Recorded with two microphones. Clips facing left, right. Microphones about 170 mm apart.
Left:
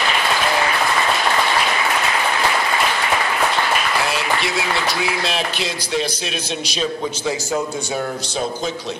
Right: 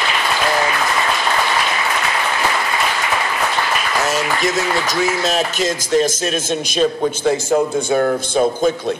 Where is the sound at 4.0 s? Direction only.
45° right (ahead or behind).